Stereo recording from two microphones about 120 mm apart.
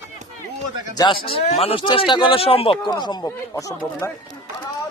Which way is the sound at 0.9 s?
45° left (ahead or behind).